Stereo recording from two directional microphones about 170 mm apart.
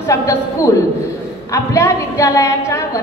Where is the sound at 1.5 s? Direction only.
20° left (ahead or behind).